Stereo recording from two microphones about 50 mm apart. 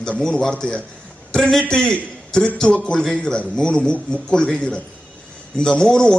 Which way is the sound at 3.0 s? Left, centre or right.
Centre.